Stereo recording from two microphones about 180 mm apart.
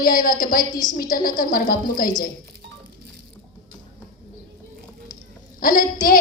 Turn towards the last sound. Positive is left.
turn(degrees=50)  # may be behind; listen again after turning